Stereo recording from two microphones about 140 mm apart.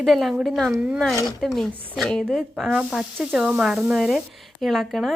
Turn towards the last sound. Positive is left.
turn(degrees=0)  # may be behind; listen again after turning